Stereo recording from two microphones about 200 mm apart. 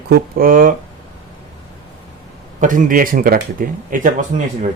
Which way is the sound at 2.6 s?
40° right (ahead or behind).